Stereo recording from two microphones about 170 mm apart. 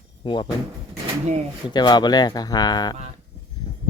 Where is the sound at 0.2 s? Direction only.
30° left (ahead or behind).